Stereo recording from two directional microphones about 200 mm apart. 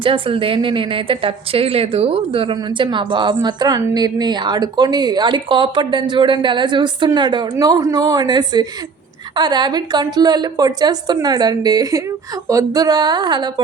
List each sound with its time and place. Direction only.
0.0 s a woman's voice: 25° right (ahead or behind)